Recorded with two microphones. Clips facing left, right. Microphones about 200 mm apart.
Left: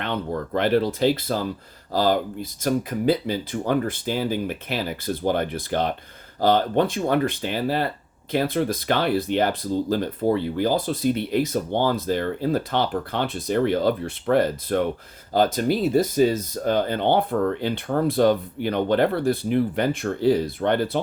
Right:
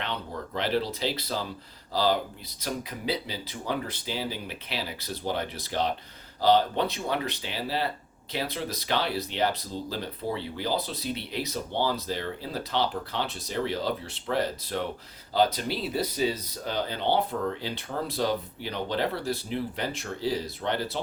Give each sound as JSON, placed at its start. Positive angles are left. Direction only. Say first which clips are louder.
{"t": 0.0, "sound": "speech", "louder": "left 8 dB", "side_deg": 55}